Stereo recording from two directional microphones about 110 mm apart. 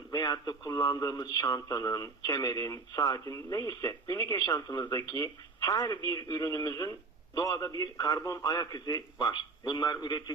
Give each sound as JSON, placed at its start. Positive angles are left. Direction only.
{"t": 0.1, "sound": "speech", "side_deg": 35}